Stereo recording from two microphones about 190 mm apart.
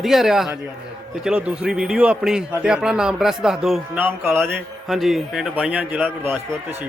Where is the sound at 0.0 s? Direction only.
Centre (ahead or behind).